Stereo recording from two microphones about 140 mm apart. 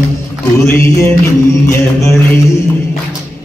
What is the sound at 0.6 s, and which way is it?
Music, 15° left (ahead or behind).